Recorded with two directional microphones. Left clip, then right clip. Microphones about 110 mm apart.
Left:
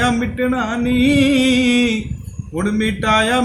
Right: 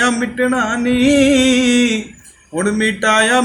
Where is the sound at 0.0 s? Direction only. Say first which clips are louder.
Right 2 dB; 40° left (ahead or behind).